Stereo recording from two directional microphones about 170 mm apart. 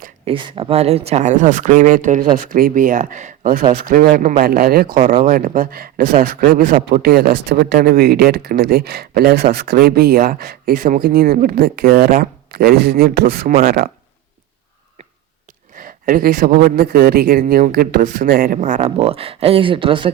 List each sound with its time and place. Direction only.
0.3 s a man's voice: 30° right (ahead or behind); by 13.9 s 60° right (ahead or behind)
15.7 s a man's voice: 55° right (ahead or behind); by 20.1 s 30° right (ahead or behind)